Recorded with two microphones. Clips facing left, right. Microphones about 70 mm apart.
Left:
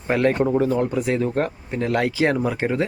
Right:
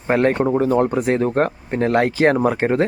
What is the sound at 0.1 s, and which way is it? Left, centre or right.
Speech, right.